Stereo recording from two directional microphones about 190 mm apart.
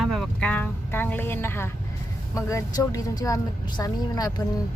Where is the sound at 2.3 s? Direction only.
15° left (ahead or behind).